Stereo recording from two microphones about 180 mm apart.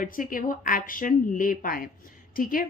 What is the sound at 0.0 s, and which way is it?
A woman's voice, 50° left (ahead or behind).